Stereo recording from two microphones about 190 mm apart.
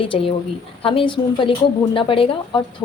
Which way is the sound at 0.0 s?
30° left (ahead or behind).